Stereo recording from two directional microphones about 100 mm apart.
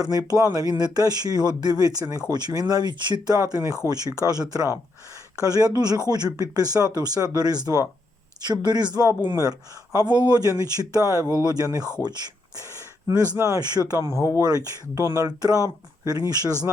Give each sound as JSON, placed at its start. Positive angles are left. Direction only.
{"t": 0.0, "sound": "speech", "side_deg": -40}
{"t": 12.0, "sound": "a sound", "side_deg": -45}
{"t": 13.3, "sound": "speech", "side_deg": -30}
{"t": 14.4, "sound": "speech", "side_deg": -40}